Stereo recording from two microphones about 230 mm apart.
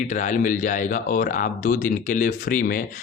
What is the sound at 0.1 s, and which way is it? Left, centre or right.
Speech, left.